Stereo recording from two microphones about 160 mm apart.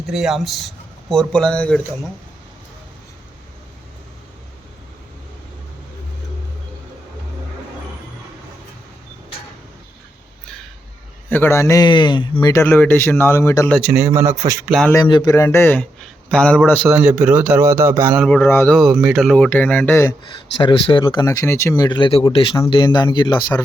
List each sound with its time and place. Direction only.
0.1 s speech: 5° right (ahead or behind)
11.3 s a man's voice: 15° left (ahead or behind)
12.6 s a man's voice: 10° left (ahead or behind)
13.9 s a man's voice: 15° right (ahead or behind)
14.7 s speech: centre (ahead or behind)
14.9 s a man's voice: 25° left (ahead or behind)
15.4 s a man's voice: 15° left (ahead or behind)
16.9 s a man's voice: 10° right (ahead or behind)
18.2 s a man's voice: 10° left (ahead or behind)
18.7 s a man's voice: centre (ahead or behind); by 20.1 s 15° left (ahead or behind)
20.2 s a man's voice: 30° left (ahead or behind)
21.8 s a man's voice: 30° left (ahead or behind)